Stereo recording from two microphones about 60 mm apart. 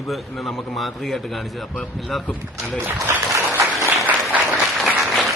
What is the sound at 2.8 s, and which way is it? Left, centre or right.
Applause, right.